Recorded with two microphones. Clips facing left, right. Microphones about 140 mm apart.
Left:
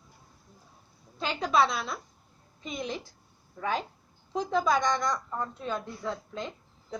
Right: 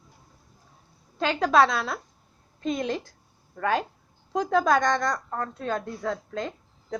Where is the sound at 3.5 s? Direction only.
70° right (ahead or behind).